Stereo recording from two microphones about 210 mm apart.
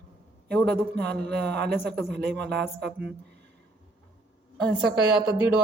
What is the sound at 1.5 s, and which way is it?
Speech, 55° right (ahead or behind).